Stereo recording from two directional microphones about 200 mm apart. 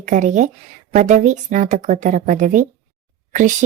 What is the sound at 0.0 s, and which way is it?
Speech, 40° right (ahead or behind).